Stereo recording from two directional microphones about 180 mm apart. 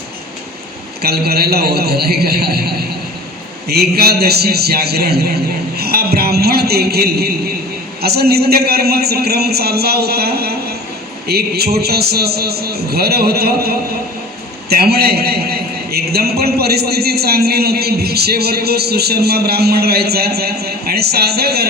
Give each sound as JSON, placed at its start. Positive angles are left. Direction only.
{"t": 1.0, "sound": "a man's voice", "side_deg": -60}